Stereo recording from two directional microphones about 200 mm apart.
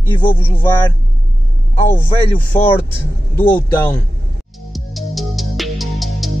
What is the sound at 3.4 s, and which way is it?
Speech, 10° left (ahead or behind).